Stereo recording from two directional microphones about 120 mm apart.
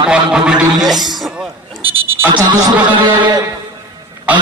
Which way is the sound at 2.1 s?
15° right (ahead or behind).